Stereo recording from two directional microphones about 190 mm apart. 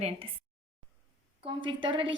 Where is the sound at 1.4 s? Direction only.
25° right (ahead or behind).